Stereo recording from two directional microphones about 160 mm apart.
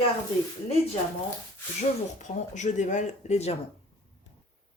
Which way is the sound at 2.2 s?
50° left (ahead or behind).